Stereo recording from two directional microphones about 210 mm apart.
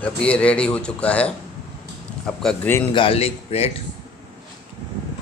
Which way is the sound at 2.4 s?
5° left (ahead or behind).